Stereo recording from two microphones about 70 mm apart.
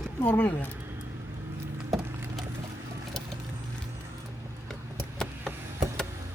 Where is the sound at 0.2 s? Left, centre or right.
Left.